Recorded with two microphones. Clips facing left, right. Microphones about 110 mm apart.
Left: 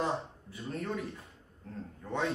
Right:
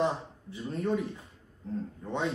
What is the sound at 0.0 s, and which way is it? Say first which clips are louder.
Speech: right 3 dB; 25° right (ahead or behind).